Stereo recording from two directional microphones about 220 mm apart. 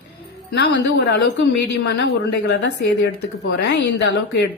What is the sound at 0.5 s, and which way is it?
Speech, 55° left (ahead or behind).